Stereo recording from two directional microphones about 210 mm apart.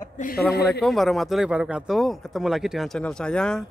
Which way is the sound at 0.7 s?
Centre (ahead or behind).